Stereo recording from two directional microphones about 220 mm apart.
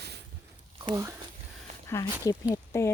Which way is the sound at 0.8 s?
15° right (ahead or behind).